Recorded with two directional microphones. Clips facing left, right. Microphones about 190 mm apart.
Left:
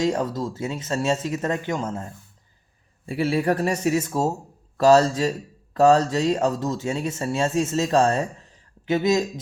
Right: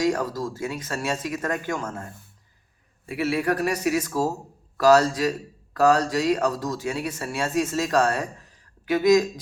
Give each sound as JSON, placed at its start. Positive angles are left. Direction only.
{"t": 0.0, "sound": "speech", "side_deg": 25}
{"t": 3.1, "sound": "speech", "side_deg": 30}